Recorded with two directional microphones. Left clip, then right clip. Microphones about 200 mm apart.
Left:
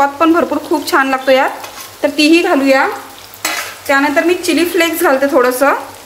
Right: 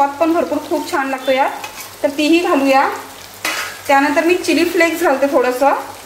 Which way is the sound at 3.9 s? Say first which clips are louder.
Left 1 dB; 20° left (ahead or behind).